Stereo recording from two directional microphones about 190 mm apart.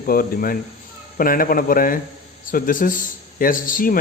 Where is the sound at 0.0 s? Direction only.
50° left (ahead or behind).